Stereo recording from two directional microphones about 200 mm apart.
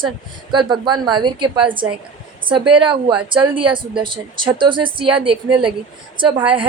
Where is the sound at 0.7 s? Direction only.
20° right (ahead or behind).